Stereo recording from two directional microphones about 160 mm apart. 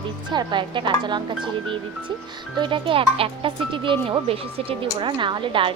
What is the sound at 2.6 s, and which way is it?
Speech, 30° right (ahead or behind).